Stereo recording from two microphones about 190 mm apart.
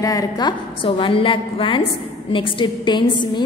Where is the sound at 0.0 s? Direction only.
20° left (ahead or behind).